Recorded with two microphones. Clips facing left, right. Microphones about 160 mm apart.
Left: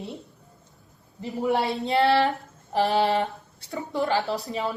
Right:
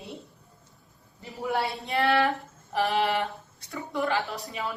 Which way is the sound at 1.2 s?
20° left (ahead or behind).